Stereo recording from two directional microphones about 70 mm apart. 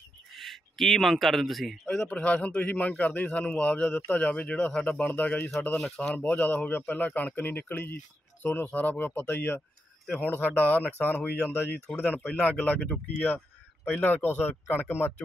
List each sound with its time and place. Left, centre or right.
0.3 s speech: centre; by 5.5 s left
5.8 s speech: centre
6.1 s speech: left
13.8 s speech: left